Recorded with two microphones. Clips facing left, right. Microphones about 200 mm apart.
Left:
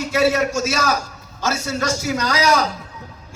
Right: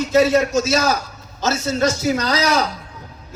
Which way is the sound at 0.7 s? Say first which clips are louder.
Right 3 dB; 30° right (ahead or behind).